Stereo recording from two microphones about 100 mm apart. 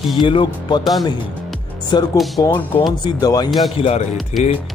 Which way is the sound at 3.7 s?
80° left.